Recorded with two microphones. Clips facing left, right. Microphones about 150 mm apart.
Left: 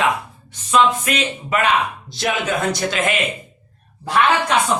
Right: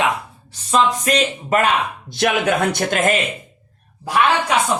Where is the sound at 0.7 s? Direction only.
40° right (ahead or behind); by 3.0 s 60° right (ahead or behind).